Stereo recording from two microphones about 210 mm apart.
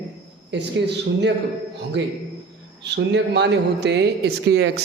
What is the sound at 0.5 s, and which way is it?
Speech, 55° right (ahead or behind).